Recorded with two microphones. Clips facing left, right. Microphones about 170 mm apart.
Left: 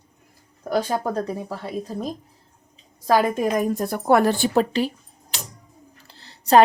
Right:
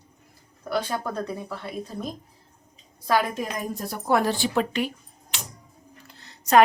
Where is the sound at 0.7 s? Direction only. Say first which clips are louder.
Left 5 dB; 40° left (ahead or behind).